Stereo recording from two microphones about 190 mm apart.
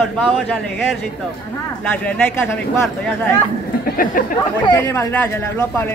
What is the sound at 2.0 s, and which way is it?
Speech, 10° left (ahead or behind).